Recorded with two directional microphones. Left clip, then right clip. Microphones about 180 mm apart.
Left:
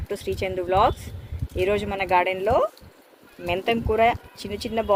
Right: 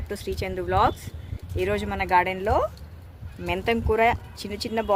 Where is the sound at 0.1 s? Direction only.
40° right (ahead or behind).